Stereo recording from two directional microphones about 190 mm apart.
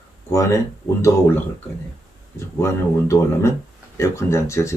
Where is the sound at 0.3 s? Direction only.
15° left (ahead or behind).